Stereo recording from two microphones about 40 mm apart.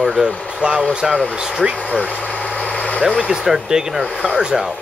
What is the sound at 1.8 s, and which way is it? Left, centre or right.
Speech, left.